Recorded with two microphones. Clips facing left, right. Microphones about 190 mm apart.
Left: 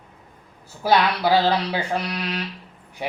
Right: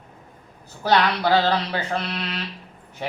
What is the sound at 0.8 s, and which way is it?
A man's voice, 10° left (ahead or behind).